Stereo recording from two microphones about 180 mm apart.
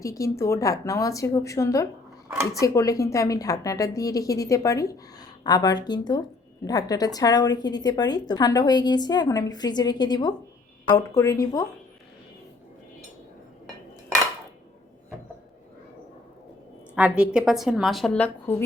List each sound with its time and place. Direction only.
0.0 s a woman's voice: 15° left (ahead or behind)
2.3 s a woman's voice: 5° right (ahead or behind)
2.6 s a woman's voice: 15° left (ahead or behind)
16.9 s a woman's voice: 5° right (ahead or behind)